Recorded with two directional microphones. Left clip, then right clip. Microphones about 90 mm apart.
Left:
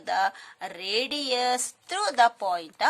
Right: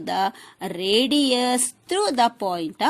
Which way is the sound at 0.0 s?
40° right (ahead or behind).